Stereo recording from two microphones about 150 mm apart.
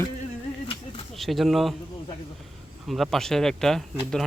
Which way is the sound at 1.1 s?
Centre (ahead or behind).